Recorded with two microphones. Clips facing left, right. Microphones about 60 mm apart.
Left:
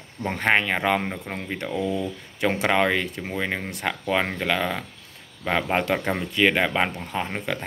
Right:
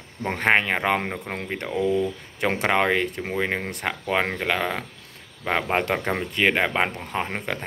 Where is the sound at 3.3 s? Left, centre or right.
Right.